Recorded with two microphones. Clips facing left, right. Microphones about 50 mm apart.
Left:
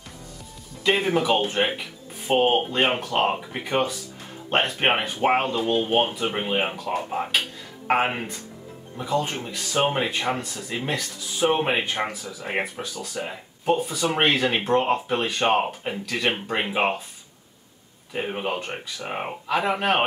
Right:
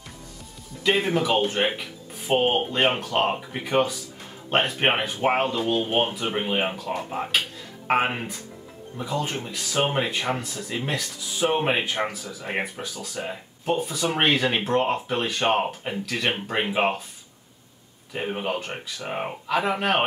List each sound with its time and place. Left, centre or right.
0.8 s speech: centre
18.1 s speech: centre